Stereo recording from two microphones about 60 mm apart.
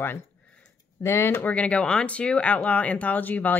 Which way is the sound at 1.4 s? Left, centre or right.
Left.